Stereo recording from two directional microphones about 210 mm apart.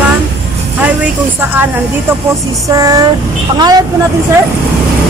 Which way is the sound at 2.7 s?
15° right (ahead or behind).